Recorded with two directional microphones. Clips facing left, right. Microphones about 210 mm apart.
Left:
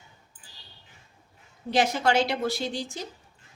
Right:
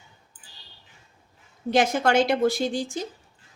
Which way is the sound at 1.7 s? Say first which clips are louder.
Right 3 dB; 50° right (ahead or behind).